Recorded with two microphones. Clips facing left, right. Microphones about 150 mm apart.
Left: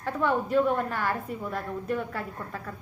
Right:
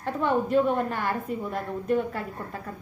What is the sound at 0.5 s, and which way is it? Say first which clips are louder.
A woman's voice: right 1 dB; 25° right (ahead or behind).